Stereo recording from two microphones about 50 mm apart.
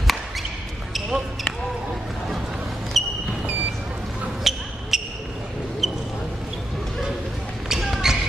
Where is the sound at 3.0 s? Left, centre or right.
Centre.